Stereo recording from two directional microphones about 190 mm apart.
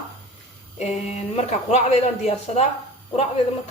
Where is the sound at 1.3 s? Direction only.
35° left (ahead or behind).